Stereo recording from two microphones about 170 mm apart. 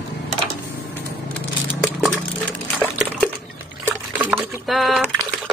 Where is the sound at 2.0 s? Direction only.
10° right (ahead or behind).